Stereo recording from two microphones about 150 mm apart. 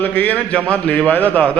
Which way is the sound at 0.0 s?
10° left (ahead or behind).